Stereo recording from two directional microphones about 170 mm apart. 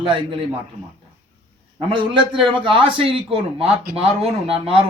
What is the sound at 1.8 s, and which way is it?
Speech, 30° right (ahead or behind).